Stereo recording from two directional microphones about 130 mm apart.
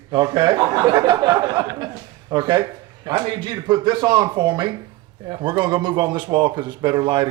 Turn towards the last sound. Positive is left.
turn(degrees=-35)  # may be behind; listen again after turning